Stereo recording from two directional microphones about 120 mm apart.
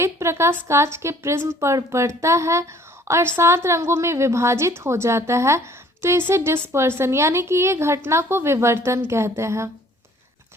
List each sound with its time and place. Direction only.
0.0 s a woman's voice: 20° right (ahead or behind)